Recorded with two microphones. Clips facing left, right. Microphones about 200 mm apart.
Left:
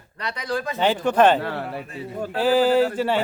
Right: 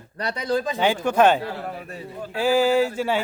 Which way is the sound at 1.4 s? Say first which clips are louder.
Left 2 dB; 65° left (ahead or behind).